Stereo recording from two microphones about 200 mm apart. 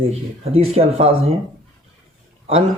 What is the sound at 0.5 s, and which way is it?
Speech, 30° right (ahead or behind).